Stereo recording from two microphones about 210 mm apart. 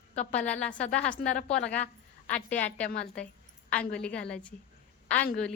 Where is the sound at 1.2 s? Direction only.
40° left (ahead or behind).